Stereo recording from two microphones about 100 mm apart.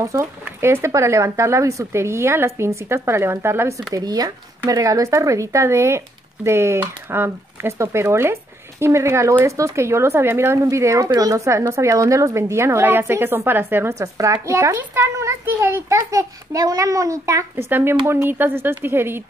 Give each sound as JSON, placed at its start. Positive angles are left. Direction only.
{"t": 0.0, "sound": "speech", "side_deg": -30}
{"t": 4.0, "sound": "a child's voice", "side_deg": -40}